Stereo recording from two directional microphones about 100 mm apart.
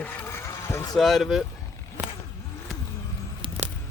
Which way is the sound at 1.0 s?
Centre (ahead or behind).